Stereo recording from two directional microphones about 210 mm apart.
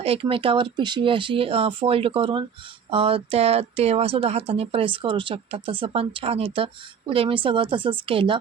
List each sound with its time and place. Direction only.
0.0 s speech: 25° right (ahead or behind)